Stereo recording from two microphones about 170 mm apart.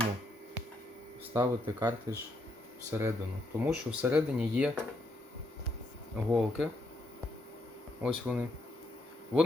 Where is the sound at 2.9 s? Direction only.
15° right (ahead or behind).